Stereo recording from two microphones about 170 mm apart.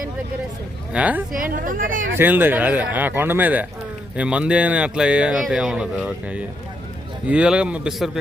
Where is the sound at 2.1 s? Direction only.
10° right (ahead or behind).